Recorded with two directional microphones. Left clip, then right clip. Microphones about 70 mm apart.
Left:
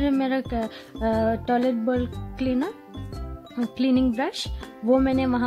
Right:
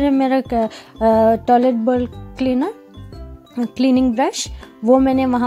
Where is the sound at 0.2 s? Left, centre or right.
Right.